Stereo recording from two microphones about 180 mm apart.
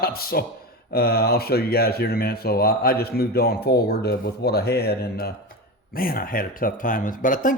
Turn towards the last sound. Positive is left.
turn(degrees=45)  # may be behind; listen again after turning